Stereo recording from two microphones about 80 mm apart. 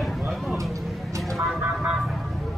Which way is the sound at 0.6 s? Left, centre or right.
Right.